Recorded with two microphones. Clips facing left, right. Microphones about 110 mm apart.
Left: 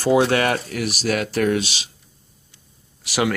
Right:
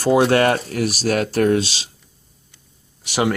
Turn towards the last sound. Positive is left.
turn(degrees=-25)  # may be behind; listen again after turning